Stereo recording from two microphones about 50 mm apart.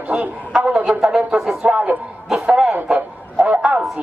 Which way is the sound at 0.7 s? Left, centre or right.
Right.